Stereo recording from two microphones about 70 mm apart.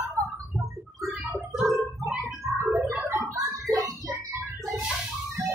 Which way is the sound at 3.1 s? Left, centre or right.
Right.